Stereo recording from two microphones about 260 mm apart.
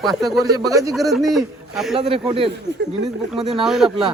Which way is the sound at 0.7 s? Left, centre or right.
Centre.